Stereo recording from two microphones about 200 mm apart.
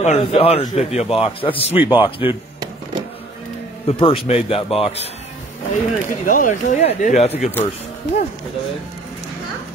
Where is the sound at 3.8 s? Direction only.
25° left (ahead or behind).